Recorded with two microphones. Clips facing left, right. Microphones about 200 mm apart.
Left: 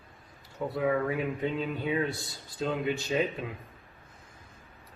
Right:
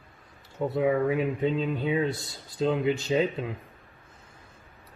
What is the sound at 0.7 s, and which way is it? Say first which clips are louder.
Speech: right 4 dB; 25° right (ahead or behind).